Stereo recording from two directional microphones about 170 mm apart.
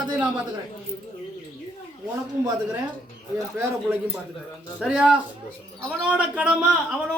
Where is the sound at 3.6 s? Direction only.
15° right (ahead or behind).